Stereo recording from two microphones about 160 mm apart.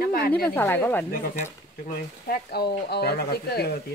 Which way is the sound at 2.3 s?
80° left.